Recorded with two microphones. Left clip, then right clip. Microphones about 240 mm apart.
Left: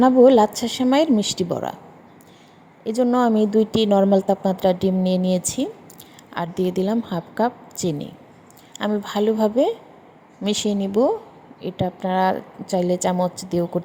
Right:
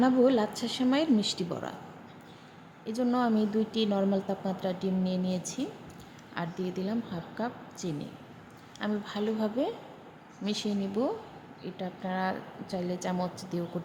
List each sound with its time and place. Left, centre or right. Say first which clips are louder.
0.0 s speech: left 12 dB; left
2.8 s speech: left 11 dB; left